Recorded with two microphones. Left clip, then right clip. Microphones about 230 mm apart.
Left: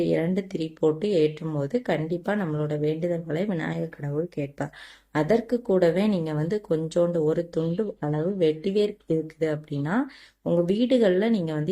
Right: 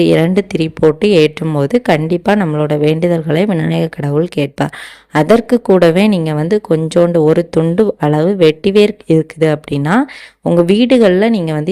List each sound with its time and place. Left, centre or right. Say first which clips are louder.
0.0 s a woman's voice: right 14 dB; right